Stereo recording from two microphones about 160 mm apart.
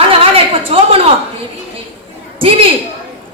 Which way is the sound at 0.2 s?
35° right (ahead or behind).